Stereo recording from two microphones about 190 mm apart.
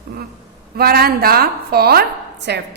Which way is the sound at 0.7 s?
55° right (ahead or behind).